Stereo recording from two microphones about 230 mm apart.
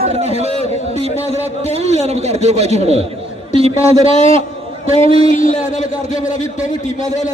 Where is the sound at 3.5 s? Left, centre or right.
Right.